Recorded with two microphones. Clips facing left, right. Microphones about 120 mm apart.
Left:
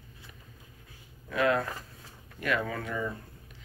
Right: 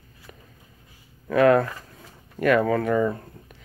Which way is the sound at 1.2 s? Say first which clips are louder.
Right 10 dB; 50° right (ahead or behind).